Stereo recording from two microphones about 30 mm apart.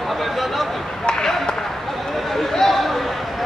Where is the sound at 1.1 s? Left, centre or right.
Left.